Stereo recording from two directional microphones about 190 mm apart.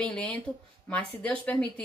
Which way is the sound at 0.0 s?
5° left (ahead or behind).